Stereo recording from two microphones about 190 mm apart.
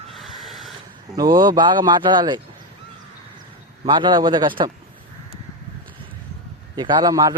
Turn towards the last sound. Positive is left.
turn(degrees=-20)  # may be behind; listen again after turning